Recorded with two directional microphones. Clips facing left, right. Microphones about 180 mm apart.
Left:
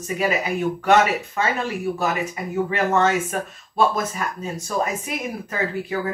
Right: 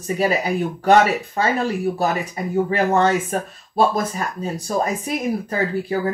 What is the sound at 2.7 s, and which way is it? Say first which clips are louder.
Speech: right 1 dB; 35° right (ahead or behind).